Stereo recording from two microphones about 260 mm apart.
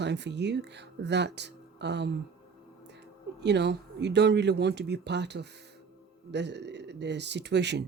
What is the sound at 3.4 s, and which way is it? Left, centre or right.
Speech, right.